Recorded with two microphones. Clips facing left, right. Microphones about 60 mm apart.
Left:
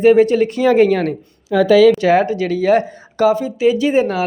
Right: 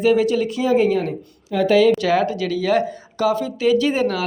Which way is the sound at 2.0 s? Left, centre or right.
Left.